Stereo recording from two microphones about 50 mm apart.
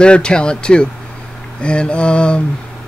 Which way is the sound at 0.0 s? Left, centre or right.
Centre.